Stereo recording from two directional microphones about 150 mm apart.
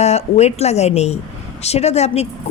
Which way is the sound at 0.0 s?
45° left (ahead or behind).